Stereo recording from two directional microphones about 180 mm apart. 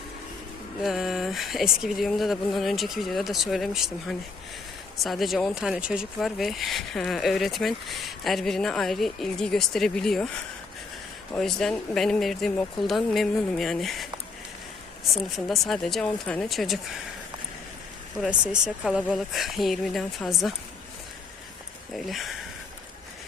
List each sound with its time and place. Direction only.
0.8 s speech: centre (ahead or behind)
11.3 s speech: 5° left (ahead or behind)
15.1 s speech: centre (ahead or behind)
18.2 s speech: 5° right (ahead or behind)
21.9 s speech: centre (ahead or behind)